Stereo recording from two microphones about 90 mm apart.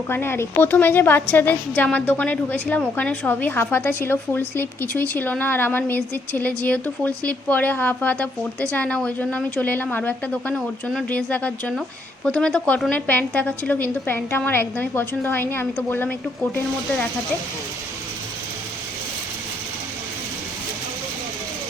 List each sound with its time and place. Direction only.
0.1 s a woman's voice: 25° left (ahead or behind)